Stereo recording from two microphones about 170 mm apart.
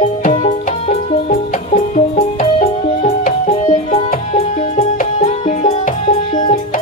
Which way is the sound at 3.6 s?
35° left (ahead or behind).